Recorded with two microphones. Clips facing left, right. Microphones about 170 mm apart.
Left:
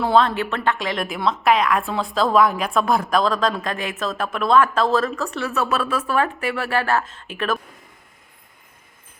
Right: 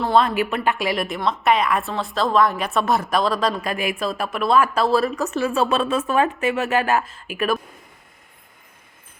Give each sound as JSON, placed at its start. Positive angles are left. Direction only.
{"t": 0.2, "sound": "a woman's voice", "side_deg": -10}
{"t": 5.5, "sound": "speech", "side_deg": -25}